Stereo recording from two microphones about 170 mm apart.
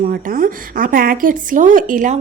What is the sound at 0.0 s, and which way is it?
Speech, 55° right (ahead or behind).